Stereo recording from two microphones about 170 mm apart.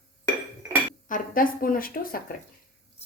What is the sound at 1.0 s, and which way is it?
Speech, 50° left (ahead or behind).